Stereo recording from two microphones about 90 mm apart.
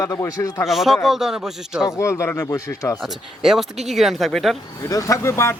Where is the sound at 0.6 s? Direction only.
Centre (ahead or behind).